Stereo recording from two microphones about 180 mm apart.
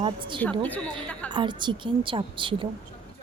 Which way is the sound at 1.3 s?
25° right (ahead or behind).